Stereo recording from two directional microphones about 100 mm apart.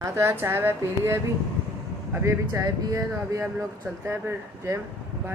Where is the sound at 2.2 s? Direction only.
35° right (ahead or behind).